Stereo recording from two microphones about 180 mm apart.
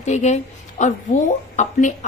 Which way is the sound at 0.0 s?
40° left (ahead or behind).